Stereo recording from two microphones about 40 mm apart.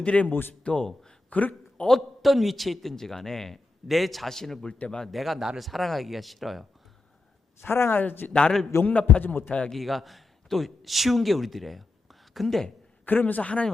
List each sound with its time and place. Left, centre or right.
0.0 s a man's voice: left
0.3 s speech: left
0.6 s a man's voice: left
1.3 s a man's voice: left
2.2 s a man's voice: centre
7.6 s speech: left
7.9 s speech: left
8.3 s a man's voice: left
8.8 s a man's voice: left
9.7 s a man's voice: centre
13.1 s a man's voice: left